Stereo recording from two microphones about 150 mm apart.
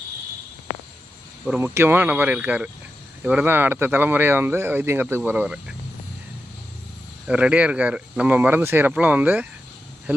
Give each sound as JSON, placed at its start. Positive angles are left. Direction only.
{"t": 1.5, "sound": "speech", "side_deg": -15}
{"t": 7.3, "sound": "speech", "side_deg": -5}